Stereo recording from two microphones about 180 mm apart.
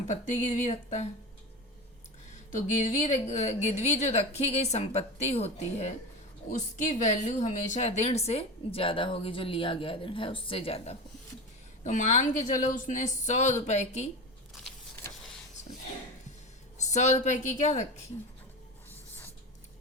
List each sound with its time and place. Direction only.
0.1 s a woman's voice: 45° left (ahead or behind)
2.5 s a woman's voice: 40° left (ahead or behind)
11.8 s a woman's voice: 45° left (ahead or behind)
16.7 s a woman's voice: 40° left (ahead or behind)
18.9 s writing: 10° left (ahead or behind)